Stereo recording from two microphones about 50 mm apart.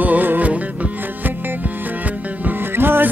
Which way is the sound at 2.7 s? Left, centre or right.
Right.